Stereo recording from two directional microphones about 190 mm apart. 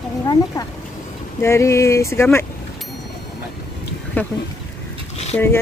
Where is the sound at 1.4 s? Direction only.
15° left (ahead or behind).